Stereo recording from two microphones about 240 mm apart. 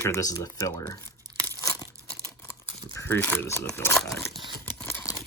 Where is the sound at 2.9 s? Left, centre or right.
Centre.